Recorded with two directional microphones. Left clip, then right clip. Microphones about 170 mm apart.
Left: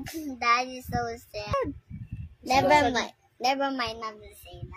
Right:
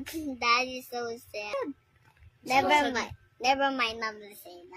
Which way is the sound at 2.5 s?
20° left (ahead or behind).